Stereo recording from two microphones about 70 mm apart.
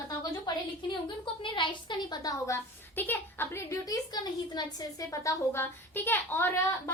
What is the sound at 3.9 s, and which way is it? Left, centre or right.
Speech, left.